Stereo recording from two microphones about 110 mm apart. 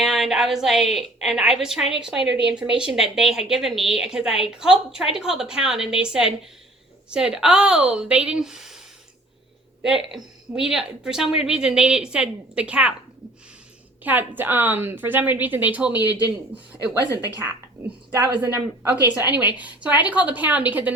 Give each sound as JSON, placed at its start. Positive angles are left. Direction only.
{"t": 0.0, "sound": "a woman's voice", "side_deg": 0}
{"t": 9.8, "sound": "a woman's voice", "side_deg": -5}
{"t": 14.0, "sound": "a woman's voice", "side_deg": -15}
{"t": 18.1, "sound": "a woman's voice", "side_deg": -20}